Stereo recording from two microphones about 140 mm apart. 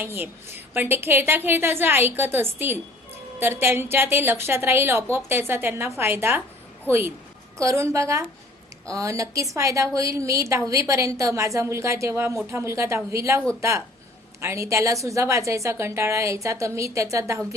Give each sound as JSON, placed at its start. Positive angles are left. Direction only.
{"t": 0.0, "sound": "a woman's voice", "side_deg": -15}
{"t": 7.6, "sound": "a woman's voice", "side_deg": -20}